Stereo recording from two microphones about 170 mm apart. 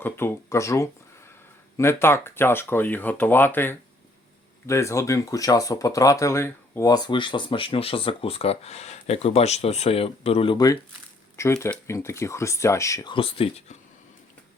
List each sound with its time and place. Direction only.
0.0 s speech: 15° left (ahead or behind)
13.1 s speech: 35° left (ahead or behind)